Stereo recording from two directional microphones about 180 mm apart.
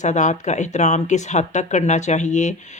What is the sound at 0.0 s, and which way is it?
Speech, 40° left (ahead or behind).